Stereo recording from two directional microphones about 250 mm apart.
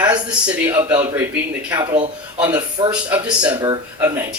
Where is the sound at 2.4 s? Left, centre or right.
Centre.